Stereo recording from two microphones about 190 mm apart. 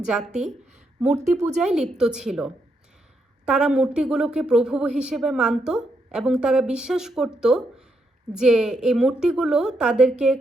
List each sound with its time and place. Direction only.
0.1 s a woman's voice: 5° right (ahead or behind)
1.0 s speech: 35° right (ahead or behind)
1.6 s a woman's voice: 5° right (ahead or behind)